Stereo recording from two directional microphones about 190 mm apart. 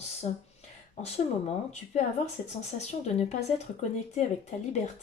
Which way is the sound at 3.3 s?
35° left (ahead or behind).